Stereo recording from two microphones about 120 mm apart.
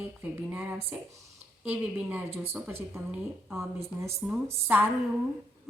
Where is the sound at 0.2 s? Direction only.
15° right (ahead or behind).